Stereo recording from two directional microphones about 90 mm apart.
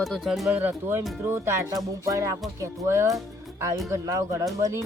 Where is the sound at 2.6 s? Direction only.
30° right (ahead or behind).